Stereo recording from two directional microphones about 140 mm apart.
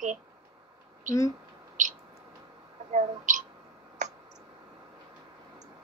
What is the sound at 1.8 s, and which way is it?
Speech, 65° right (ahead or behind).